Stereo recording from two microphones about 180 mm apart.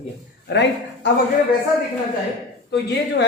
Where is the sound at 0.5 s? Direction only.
75° left (ahead or behind).